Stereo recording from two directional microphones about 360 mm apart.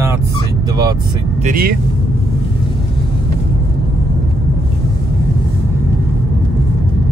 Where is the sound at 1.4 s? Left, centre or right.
Right.